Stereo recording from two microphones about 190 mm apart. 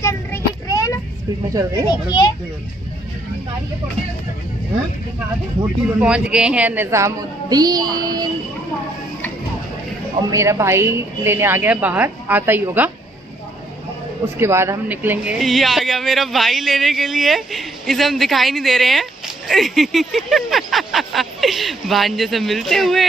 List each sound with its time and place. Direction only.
0.0 s child singing: 15° left (ahead or behind)
1.9 s a child's voice: 20° left (ahead or behind)
5.9 s a woman's voice: 5° right (ahead or behind)
10.3 s a woman's voice: 15° right (ahead or behind)
14.2 s speech: 15° right (ahead or behind)